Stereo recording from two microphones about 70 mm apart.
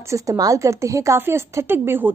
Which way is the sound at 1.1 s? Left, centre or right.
Right.